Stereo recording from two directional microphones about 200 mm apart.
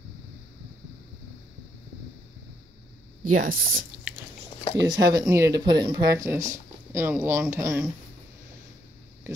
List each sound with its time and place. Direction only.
3.3 s speech: 45° right (ahead or behind)
4.8 s speech: 20° right (ahead or behind)